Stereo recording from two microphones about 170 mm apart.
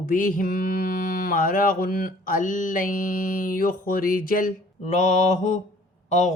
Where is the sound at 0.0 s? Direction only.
55° left (ahead or behind).